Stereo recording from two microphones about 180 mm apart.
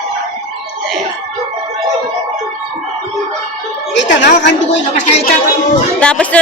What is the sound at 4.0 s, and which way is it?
Speech, 80° left.